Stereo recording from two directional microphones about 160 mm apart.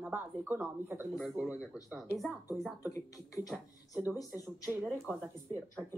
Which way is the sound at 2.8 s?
20° left (ahead or behind).